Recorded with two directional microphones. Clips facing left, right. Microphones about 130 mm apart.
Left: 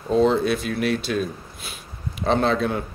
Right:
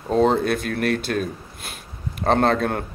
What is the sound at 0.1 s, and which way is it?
A man's voice, 50° right (ahead or behind).